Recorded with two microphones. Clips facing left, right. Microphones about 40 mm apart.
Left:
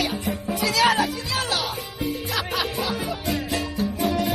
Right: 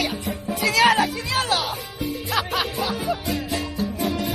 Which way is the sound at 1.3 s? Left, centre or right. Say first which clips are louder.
Right 3 dB; right.